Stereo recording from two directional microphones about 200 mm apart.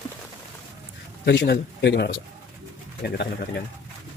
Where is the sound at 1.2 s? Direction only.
60° left (ahead or behind).